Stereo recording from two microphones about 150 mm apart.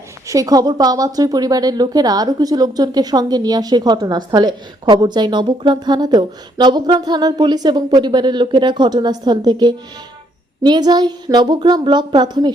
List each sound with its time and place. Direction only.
0.3 s a woman's voice: 25° right (ahead or behind)